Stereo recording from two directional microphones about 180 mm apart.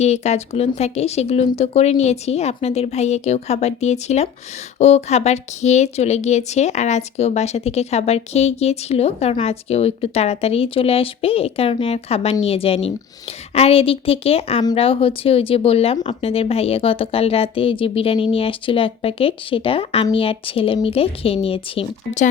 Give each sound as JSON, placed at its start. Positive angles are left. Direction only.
{"t": 0.0, "sound": "speech", "side_deg": 40}